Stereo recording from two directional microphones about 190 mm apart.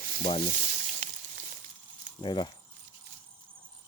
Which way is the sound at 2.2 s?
25° left (ahead or behind).